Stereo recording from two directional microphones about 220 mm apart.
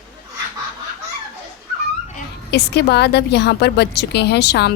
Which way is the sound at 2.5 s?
50° left (ahead or behind).